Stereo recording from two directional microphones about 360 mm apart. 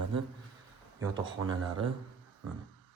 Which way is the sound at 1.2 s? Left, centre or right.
Centre.